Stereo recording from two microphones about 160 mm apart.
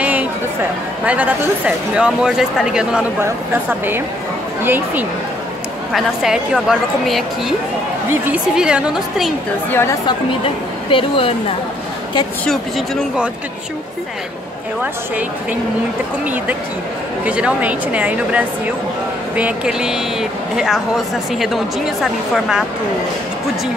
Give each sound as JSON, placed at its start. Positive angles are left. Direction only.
{"t": 1.0, "sound": "a woman's voice", "side_deg": -10}
{"t": 4.6, "sound": "a woman's voice", "side_deg": -10}
{"t": 9.7, "sound": "a woman's voice", "side_deg": 15}
{"t": 10.0, "sound": "a woman's voice", "side_deg": 35}
{"t": 12.4, "sound": "speech", "side_deg": 0}
{"t": 17.2, "sound": "a woman's voice", "side_deg": -5}